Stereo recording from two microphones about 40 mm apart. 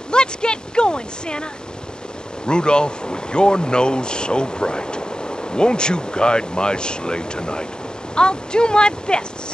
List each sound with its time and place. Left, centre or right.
0.1 s speech: left